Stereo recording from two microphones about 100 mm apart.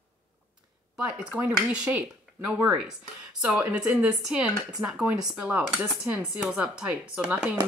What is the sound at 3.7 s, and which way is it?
Speech, 10° right (ahead or behind).